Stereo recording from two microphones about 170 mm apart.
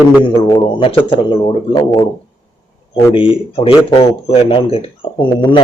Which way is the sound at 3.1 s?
30° left (ahead or behind).